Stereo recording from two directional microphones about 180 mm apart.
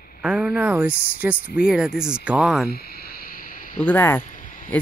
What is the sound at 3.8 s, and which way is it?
Speech, 10° left (ahead or behind).